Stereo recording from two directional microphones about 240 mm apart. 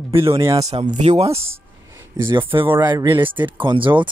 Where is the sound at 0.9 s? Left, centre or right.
Right.